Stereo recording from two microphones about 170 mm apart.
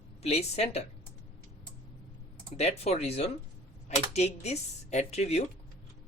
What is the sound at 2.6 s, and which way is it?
Speech, 40° left (ahead or behind).